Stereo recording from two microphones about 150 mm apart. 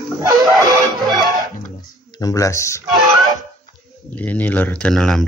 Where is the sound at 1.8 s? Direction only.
25° left (ahead or behind).